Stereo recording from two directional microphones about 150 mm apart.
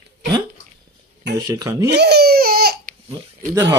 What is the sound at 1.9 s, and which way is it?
Speech, 90° right.